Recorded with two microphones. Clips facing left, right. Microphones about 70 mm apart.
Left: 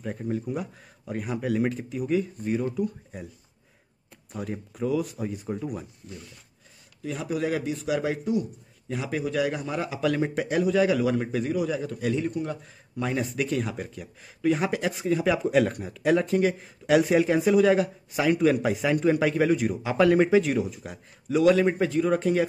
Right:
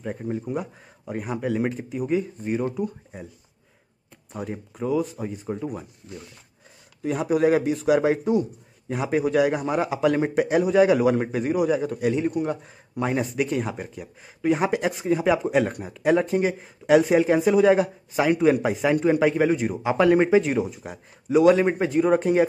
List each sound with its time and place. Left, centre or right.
0.0 s speech: centre
4.3 s speech: centre
7.0 s a man's voice: right
11.5 s a man's voice: centre
16.4 s speech: centre
21.5 s a man's voice: right